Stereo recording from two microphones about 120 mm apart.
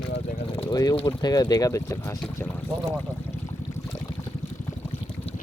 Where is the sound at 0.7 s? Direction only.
35° left (ahead or behind).